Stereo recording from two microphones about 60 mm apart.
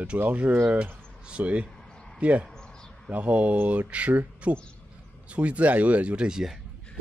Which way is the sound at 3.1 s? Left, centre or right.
Right.